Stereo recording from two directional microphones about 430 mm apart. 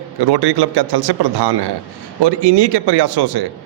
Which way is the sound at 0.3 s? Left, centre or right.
Right.